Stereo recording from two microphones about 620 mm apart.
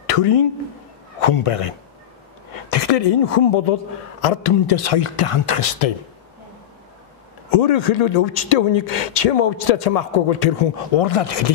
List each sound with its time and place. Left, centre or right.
0.0 s a man's voice: left
4.9 s speech: left
7.5 s speech: left